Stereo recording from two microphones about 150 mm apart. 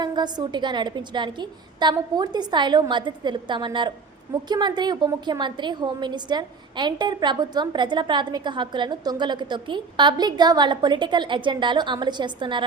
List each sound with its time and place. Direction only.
0.0 s a woman's voice: 30° right (ahead or behind)